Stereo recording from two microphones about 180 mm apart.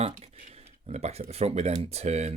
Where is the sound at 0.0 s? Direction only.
40° right (ahead or behind).